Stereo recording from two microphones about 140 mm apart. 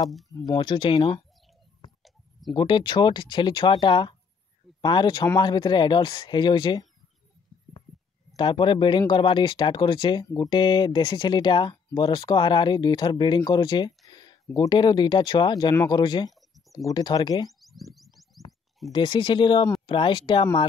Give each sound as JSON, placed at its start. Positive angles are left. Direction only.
{"t": 0.0, "sound": "speech", "side_deg": 0}
{"t": 0.6, "sound": "speech", "side_deg": 35}
{"t": 2.5, "sound": "speech", "side_deg": 35}
{"t": 8.4, "sound": "speech", "side_deg": 35}
{"t": 16.3, "sound": "a sound", "side_deg": 0}
{"t": 16.7, "sound": "speech", "side_deg": 30}
{"t": 17.6, "sound": "a sound", "side_deg": 0}
{"t": 18.9, "sound": "speech", "side_deg": 35}